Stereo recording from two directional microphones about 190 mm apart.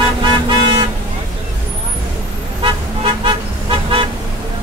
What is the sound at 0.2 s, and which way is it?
Vehicle, 25° right (ahead or behind).